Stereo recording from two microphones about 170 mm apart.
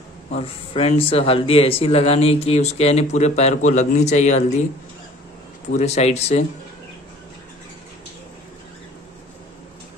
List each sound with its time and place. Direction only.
0.3 s speech: 35° left (ahead or behind)
5.7 s speech: 40° left (ahead or behind)